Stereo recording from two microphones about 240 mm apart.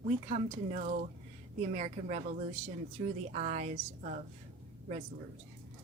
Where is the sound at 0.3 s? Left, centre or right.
Right.